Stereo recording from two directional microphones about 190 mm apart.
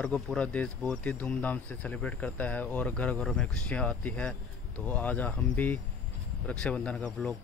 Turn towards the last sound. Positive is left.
turn(degrees=5)  # may be behind; listen again after turning